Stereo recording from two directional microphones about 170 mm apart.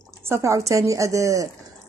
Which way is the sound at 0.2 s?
15° right (ahead or behind).